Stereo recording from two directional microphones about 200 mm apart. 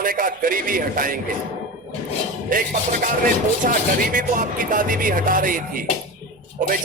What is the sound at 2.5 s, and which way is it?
Speech, 45° right (ahead or behind).